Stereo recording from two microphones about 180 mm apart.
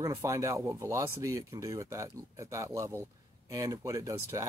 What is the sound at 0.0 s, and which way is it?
Speech, 20° right (ahead or behind).